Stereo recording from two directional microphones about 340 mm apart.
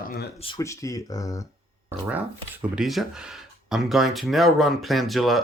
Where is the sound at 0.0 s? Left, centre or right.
Left.